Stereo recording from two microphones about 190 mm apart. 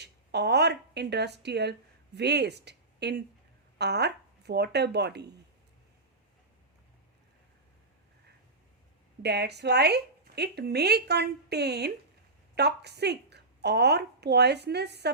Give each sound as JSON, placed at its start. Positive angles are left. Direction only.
{"t": 0.0, "sound": "a woman's voice", "side_deg": -60}
{"t": 9.2, "sound": "a woman's voice", "side_deg": -60}